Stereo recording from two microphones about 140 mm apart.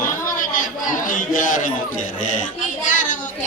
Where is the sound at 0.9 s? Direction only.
75° left (ahead or behind).